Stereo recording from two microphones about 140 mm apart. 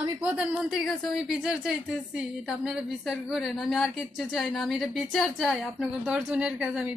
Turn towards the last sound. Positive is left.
turn(degrees=-5)  # may be behind; listen again after turning